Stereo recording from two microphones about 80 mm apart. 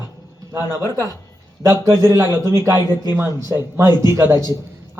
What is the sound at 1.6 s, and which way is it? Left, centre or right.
A man's voice, right.